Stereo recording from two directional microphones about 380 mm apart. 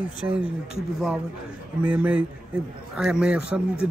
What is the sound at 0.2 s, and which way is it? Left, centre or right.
Speech, centre.